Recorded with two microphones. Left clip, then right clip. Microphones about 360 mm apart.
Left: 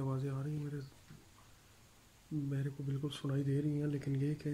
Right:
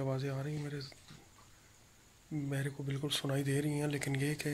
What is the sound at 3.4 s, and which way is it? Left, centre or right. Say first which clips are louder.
Speech: right 2 dB; right.